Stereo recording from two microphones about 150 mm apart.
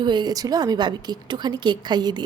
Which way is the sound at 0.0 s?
30° right (ahead or behind).